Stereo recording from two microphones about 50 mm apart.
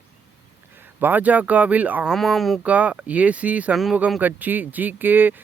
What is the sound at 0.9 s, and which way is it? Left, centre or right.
Speech, right.